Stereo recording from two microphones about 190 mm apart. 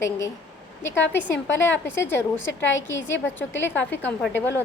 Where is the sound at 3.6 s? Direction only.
10° left (ahead or behind).